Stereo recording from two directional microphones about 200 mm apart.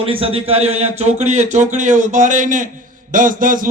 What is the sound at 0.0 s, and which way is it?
A man's voice, 30° right (ahead or behind).